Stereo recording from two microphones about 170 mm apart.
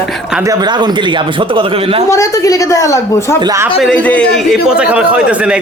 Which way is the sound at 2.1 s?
15° left (ahead or behind).